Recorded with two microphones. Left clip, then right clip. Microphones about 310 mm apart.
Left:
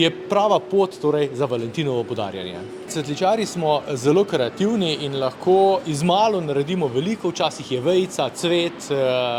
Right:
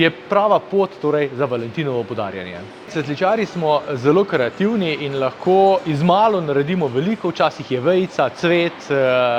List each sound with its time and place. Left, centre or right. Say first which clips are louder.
0.0 s a man's voice: right 3 dB; centre; by 9.3 s right